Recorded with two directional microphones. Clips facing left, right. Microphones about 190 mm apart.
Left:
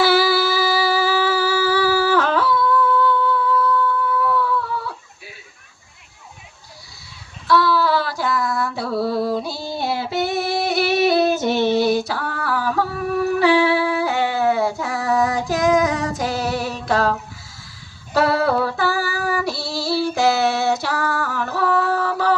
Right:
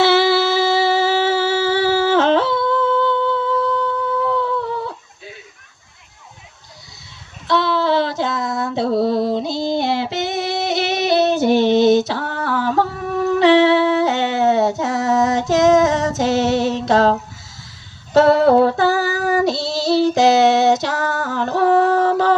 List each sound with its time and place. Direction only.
0.0 s humming: 25° right (ahead or behind)
7.4 s a sound: 20° right (ahead or behind)
18.1 s female singing: 20° right (ahead or behind)